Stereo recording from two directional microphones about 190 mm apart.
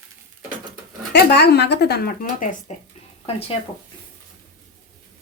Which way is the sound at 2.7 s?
35° left (ahead or behind).